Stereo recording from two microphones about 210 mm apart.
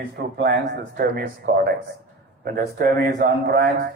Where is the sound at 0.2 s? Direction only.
50° right (ahead or behind).